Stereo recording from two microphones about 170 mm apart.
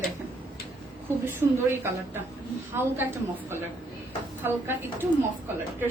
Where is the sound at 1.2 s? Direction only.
15° right (ahead or behind).